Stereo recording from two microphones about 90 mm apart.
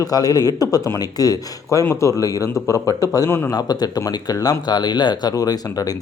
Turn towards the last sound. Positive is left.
turn(degrees=40)  # may be behind; listen again after turning